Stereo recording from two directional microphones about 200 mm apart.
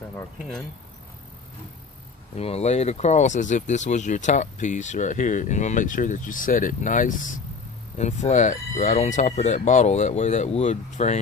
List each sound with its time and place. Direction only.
2.3 s speech: 30° left (ahead or behind)